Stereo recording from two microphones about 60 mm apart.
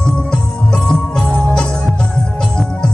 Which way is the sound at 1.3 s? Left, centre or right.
Centre.